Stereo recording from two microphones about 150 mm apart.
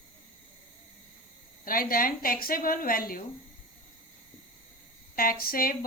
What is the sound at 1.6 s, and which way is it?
Speech, 70° left (ahead or behind).